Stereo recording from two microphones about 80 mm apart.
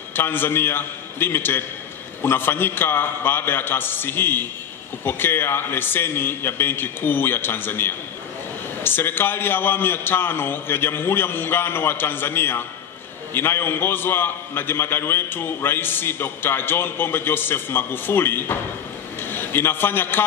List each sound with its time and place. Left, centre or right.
0.1 s a man's voice: left